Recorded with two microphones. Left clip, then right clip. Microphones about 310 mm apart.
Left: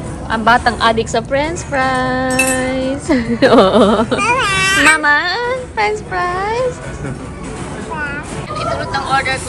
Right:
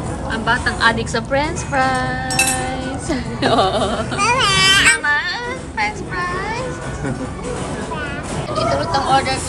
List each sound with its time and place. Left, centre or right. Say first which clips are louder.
0.3 s a woman's voice: left 7 dB; centre
2.6 s speech: left 6 dB; centre
4.2 s speech: left 1 dB; centre
8.9 s speech: left 2 dB; centre